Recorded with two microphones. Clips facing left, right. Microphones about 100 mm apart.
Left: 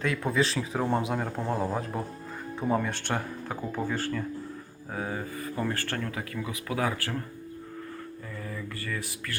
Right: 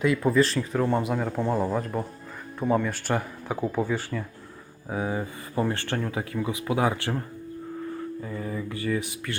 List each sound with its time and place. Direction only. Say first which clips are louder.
0.0 s speech: right 5 dB; 5° right (ahead or behind); by 7.2 s 20° right (ahead or behind)
8.4 s speech: right 4 dB; 25° right (ahead or behind)